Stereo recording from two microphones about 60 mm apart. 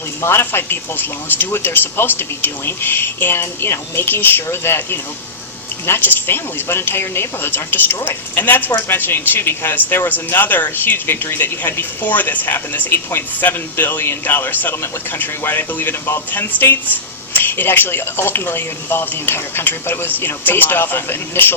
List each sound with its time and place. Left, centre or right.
0.2 s speech: left